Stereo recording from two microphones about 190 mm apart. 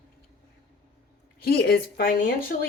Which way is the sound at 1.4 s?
55° left (ahead or behind).